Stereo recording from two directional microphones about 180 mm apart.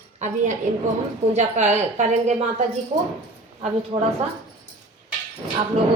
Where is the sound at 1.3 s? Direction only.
40° right (ahead or behind).